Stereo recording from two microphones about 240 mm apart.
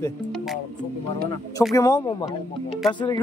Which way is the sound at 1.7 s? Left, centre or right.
Centre.